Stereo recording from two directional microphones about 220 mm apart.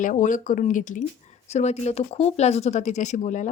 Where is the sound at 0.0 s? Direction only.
35° left (ahead or behind).